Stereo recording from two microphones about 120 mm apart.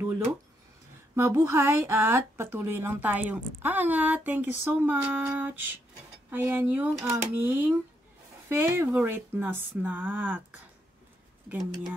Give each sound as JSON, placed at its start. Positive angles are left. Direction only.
{"t": 1.1, "sound": "a woman's voice", "side_deg": -20}
{"t": 11.4, "sound": "speech", "side_deg": -5}